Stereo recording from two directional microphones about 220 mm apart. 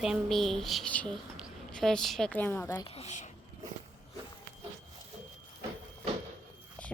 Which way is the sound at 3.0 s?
30° left (ahead or behind).